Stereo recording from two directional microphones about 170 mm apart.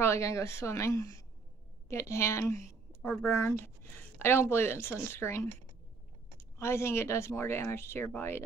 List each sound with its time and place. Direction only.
0.0 s a woman's voice: 15° left (ahead or behind)